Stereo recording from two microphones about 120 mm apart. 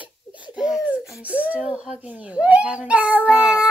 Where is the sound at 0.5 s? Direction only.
5° right (ahead or behind).